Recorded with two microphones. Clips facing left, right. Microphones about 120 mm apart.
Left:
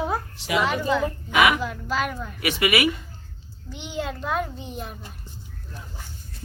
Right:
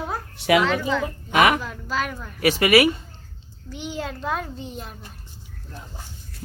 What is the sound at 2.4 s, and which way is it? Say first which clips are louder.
Speech: right 6 dB; 35° right (ahead or behind).